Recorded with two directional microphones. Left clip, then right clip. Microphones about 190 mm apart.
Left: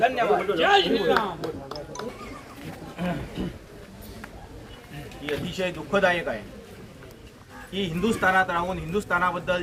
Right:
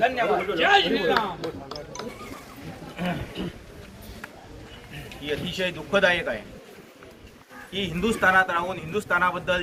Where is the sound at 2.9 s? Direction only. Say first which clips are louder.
Right 1 dB; 25° left (ahead or behind).